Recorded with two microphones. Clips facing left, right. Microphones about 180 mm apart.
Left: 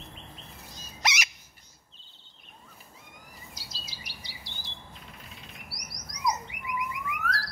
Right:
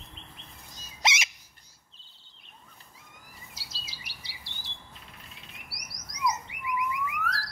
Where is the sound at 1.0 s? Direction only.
25° right (ahead or behind).